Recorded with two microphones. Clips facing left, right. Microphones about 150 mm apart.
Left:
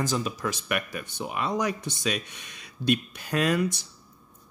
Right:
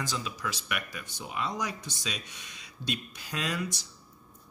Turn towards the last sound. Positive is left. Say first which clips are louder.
# left 9 dB
turn(degrees=55)  # may be behind; listen again after turning